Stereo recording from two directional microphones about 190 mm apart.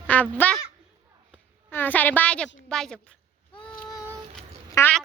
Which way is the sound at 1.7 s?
10° left (ahead or behind).